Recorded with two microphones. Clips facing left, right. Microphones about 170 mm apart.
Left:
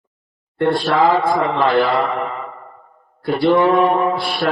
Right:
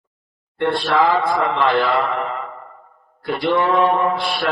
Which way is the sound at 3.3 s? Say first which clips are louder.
Left 4 dB; 30° left (ahead or behind).